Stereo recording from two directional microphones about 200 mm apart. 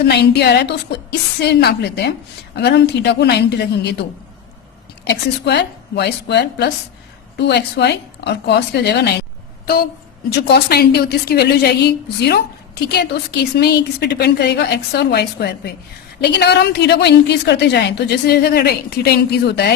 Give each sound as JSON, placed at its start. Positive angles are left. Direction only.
{"t": 0.0, "sound": "a woman's voice", "side_deg": 55}
{"t": 5.0, "sound": "a woman's voice", "side_deg": 55}
{"t": 10.3, "sound": "a woman's voice", "side_deg": 55}